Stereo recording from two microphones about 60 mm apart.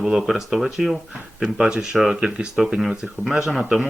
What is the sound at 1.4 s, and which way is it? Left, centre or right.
Speech, centre.